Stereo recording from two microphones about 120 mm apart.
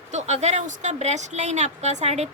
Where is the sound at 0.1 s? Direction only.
70° right (ahead or behind).